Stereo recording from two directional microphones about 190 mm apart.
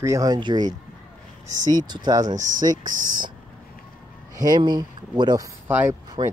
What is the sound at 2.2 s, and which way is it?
Speech, 45° right (ahead or behind).